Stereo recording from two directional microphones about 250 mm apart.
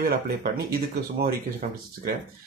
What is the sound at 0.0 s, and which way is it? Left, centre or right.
Speech, right.